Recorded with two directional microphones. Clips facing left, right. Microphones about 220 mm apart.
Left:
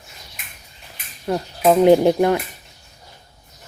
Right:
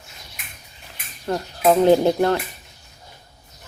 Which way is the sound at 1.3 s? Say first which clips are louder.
Left 1 dB; 10° left (ahead or behind).